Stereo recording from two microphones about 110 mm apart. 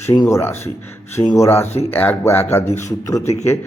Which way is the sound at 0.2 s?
25° left (ahead or behind).